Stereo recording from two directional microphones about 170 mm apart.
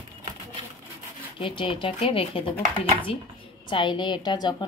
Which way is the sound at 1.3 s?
30° left (ahead or behind).